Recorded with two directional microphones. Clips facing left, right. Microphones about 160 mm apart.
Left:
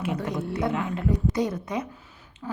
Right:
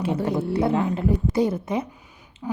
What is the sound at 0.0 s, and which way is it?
A woman's voice, 30° right (ahead or behind).